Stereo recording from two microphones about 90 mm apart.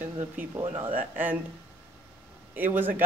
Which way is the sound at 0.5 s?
80° right.